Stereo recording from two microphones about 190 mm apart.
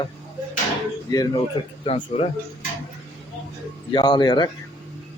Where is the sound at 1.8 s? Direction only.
30° left (ahead or behind).